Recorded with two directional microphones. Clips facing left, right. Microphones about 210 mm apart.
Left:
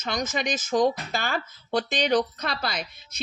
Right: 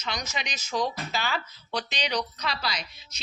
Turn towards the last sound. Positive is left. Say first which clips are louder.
# left 4 dB
turn(degrees=55)  # may be behind; listen again after turning